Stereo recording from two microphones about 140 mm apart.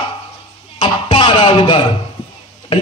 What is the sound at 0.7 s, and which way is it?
Music, 35° left (ahead or behind).